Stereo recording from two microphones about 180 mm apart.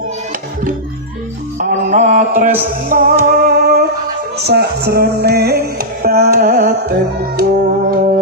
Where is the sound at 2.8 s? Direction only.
50° right (ahead or behind).